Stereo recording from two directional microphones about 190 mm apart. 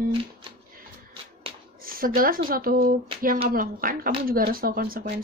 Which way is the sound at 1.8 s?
50° right (ahead or behind).